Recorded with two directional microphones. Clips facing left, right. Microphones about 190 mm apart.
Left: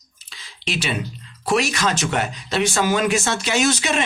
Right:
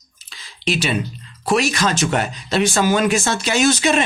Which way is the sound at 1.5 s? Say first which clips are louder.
Right 2 dB; 35° right (ahead or behind).